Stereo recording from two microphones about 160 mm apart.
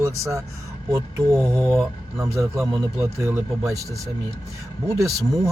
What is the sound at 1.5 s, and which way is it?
Speech, 15° right (ahead or behind).